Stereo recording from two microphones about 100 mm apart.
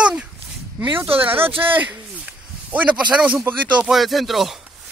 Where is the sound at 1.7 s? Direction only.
15° right (ahead or behind).